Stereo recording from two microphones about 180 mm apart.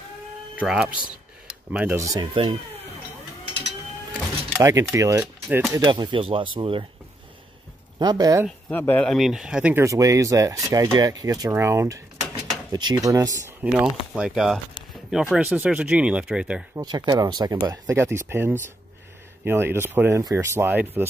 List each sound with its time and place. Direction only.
0.6 s speech: 5° right (ahead or behind); by 2.5 s 25° right (ahead or behind)
4.6 s speech: 15° right (ahead or behind)
8.0 s speech: 20° right (ahead or behind)
8.6 s speech: 10° left (ahead or behind); by 13.7 s 15° right (ahead or behind)
13.7 s speech: 5° right (ahead or behind)
16.7 s speech: 25° right (ahead or behind)